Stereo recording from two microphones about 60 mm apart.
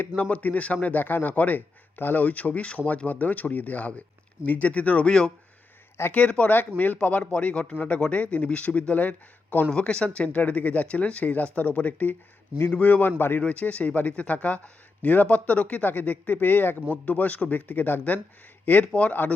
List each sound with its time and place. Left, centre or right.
0.2 s a man's voice: left
13.4 s a man's voice: left